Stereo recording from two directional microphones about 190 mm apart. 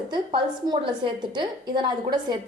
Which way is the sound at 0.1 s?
25° right (ahead or behind).